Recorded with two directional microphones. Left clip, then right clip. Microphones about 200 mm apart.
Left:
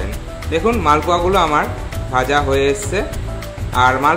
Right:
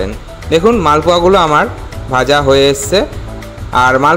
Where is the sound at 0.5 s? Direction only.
35° right (ahead or behind).